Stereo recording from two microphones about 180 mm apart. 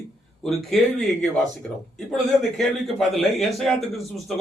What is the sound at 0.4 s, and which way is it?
Speech, centre (ahead or behind).